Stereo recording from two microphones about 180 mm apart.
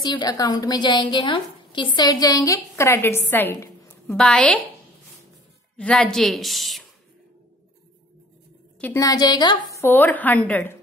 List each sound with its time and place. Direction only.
0.0 s a woman's voice: 25° left (ahead or behind); by 4.6 s 5° left (ahead or behind)
5.8 s a woman's voice: 5° left (ahead or behind)
8.8 s a woman's voice: 20° left (ahead or behind)